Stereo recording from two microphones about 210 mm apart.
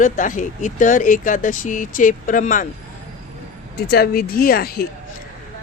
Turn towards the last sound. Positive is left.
turn(degrees=45)  # may be behind; listen again after turning